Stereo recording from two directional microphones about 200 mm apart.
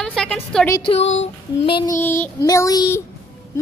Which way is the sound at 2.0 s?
10° left (ahead or behind).